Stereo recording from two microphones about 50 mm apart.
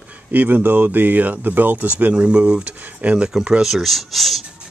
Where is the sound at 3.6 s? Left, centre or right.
Centre.